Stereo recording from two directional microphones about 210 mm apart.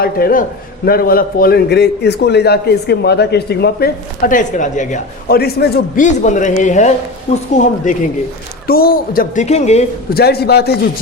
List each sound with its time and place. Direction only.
0.0 s a man's voice: 45° left (ahead or behind)
6.1 s speech: 35° left (ahead or behind)
10.1 s a man's voice: 50° left (ahead or behind)